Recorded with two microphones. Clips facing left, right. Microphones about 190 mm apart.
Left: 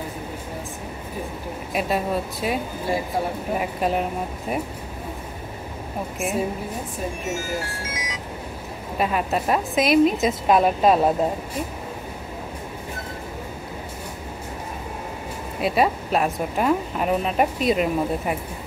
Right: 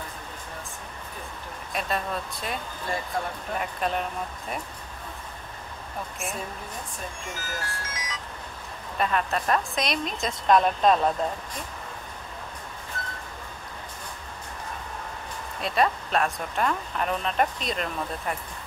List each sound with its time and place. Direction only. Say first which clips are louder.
1.7 s speech: left 6 dB; 5° left (ahead or behind)
6.1 s a woman's voice: left 11 dB; centre (ahead or behind)
7.2 s speech: left 10 dB; 25° left (ahead or behind)
7.8 s speech: left 5 dB; 10° left (ahead or behind)
15.6 s speech: left 4 dB; 5° left (ahead or behind)